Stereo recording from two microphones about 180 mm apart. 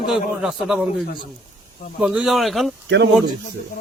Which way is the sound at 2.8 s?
80° right.